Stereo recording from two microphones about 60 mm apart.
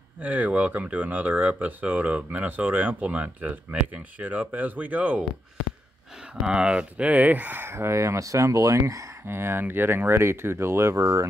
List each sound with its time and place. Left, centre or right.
0.2 s speech: right
6.4 s speech: centre; by 7.7 s right
7.7 s speech: right
9.2 s speech: right